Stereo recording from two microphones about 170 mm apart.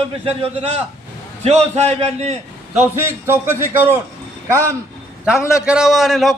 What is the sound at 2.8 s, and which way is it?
A man's voice, 15° right (ahead or behind).